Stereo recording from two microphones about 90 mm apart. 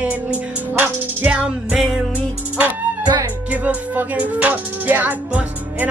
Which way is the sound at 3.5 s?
15° right (ahead or behind).